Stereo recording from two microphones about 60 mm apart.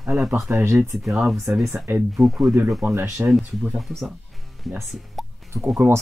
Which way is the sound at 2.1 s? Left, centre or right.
Centre.